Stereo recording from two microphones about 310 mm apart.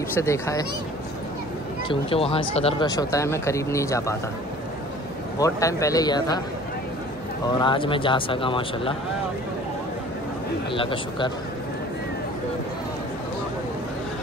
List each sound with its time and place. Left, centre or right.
0.1 s speech: centre
1.9 s speech: centre
5.4 s speech: centre
7.6 s speech: centre
10.7 s speech: centre